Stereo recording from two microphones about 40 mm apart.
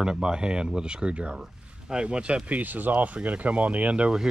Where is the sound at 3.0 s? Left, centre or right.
Right.